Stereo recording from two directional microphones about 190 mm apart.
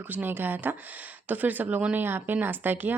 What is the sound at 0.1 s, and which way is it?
Speech, 10° right (ahead or behind).